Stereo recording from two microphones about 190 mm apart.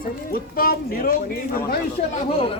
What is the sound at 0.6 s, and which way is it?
Speech, 50° left (ahead or behind).